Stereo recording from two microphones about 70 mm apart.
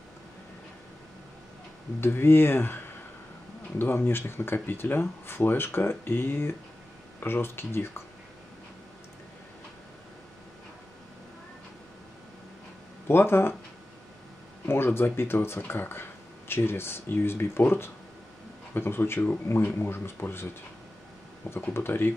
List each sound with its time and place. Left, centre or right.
2.0 s speech: left
13.1 s speech: left
15.1 s speech: left
21.5 s speech: left